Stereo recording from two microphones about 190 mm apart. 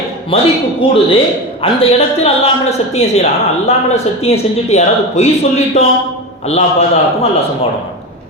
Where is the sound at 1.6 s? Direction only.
30° left (ahead or behind).